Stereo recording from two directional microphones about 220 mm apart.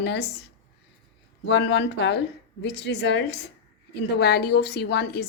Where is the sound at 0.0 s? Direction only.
50° left (ahead or behind).